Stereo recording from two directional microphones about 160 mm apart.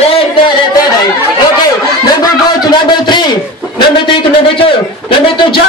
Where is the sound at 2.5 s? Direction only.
25° left (ahead or behind).